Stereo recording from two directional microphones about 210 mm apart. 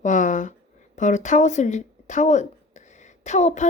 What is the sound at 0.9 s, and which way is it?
Speech, 35° left (ahead or behind).